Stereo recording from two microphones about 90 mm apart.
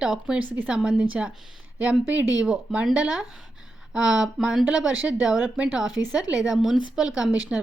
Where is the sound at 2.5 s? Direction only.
5° right (ahead or behind).